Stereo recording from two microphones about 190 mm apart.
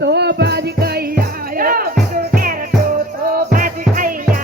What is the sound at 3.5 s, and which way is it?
Music, 45° right (ahead or behind).